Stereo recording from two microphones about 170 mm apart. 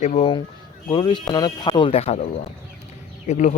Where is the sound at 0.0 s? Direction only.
40° left (ahead or behind).